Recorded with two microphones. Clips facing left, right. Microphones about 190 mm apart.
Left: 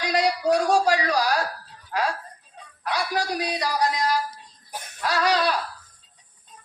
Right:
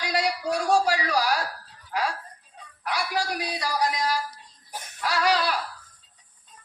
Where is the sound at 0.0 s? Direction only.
20° left (ahead or behind).